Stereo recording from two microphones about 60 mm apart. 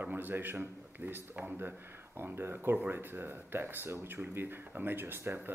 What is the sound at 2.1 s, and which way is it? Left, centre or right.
Speech, right.